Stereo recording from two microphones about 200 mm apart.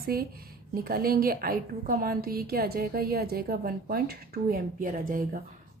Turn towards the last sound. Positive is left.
turn(degrees=-45)  # may be behind; listen again after turning